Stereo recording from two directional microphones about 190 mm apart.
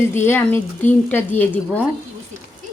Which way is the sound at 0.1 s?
10° left (ahead or behind).